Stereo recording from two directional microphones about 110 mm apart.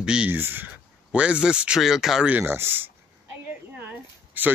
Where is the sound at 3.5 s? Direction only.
15° right (ahead or behind).